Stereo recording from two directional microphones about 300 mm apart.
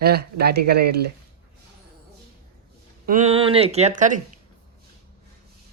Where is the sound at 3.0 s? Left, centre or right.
Right.